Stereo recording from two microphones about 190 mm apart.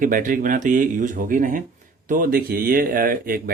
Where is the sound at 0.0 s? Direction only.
45° right (ahead or behind).